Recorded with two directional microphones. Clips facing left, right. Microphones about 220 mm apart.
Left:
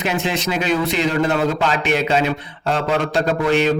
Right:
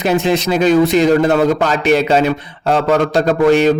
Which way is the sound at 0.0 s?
40° right (ahead or behind).